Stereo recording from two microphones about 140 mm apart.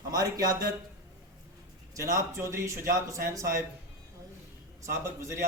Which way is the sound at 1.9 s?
20° right (ahead or behind).